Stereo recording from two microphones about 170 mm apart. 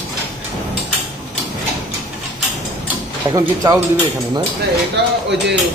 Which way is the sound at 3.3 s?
20° right (ahead or behind).